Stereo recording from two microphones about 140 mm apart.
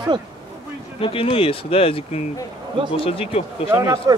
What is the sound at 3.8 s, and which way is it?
Speech, 25° right (ahead or behind).